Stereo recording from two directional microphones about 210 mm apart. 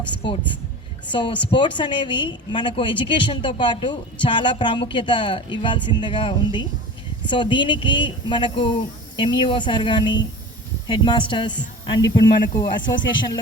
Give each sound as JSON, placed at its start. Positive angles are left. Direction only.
{"t": 0.1, "sound": "a woman's voice", "side_deg": 25}